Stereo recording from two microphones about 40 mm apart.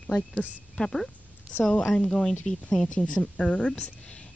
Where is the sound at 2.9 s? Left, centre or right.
Left.